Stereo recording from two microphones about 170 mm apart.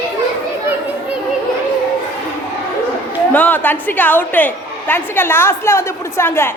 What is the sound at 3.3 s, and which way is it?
A woman's voice, 10° left (ahead or behind).